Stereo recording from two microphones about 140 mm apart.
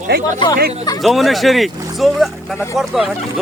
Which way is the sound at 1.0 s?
Centre (ahead or behind).